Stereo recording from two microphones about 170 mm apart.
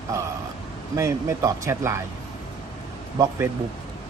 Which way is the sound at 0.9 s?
15° right (ahead or behind).